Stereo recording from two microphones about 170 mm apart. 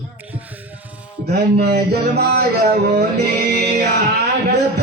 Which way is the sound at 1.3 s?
70° right (ahead or behind).